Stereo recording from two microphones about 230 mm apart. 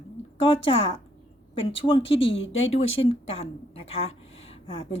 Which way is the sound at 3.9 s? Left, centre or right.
Left.